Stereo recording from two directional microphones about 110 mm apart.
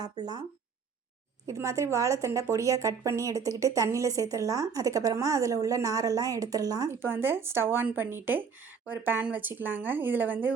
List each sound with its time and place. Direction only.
0.0 s a woman's voice: 40° right (ahead or behind)
1.5 s a woman's voice: 30° right (ahead or behind)
7.0 s a woman's voice: 20° right (ahead or behind)